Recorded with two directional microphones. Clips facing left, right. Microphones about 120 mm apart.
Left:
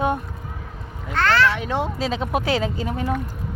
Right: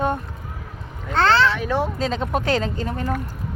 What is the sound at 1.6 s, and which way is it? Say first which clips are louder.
Speech: right 2 dB; 20° left (ahead or behind).